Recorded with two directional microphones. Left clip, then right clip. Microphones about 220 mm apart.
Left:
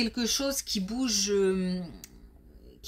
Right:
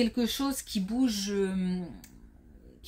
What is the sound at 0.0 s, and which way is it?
Speech, 30° left (ahead or behind).